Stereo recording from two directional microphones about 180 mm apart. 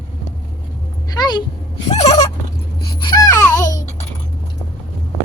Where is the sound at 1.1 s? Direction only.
25° left (ahead or behind).